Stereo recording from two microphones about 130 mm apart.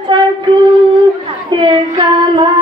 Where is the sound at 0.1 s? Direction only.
40° right (ahead or behind).